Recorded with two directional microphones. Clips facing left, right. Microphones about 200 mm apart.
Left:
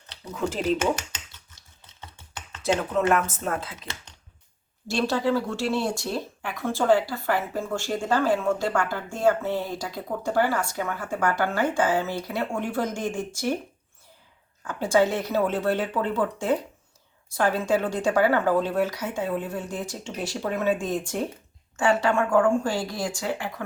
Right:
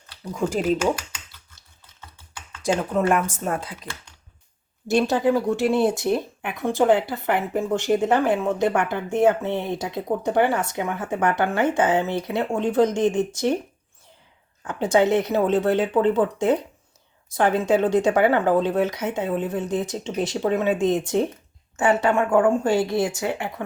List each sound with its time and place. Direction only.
0.3 s speech: 10° right (ahead or behind)
2.0 s computer keyboard: 20° left (ahead or behind)
2.9 s speech: 10° right (ahead or behind)
4.9 s speech: 20° right (ahead or behind)
14.6 s speech: 20° right (ahead or behind)